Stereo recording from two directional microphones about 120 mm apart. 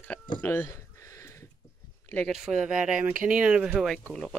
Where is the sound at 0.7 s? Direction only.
25° left (ahead or behind).